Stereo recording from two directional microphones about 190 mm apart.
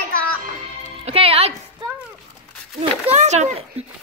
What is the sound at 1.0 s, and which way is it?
Speech, 30° right (ahead or behind).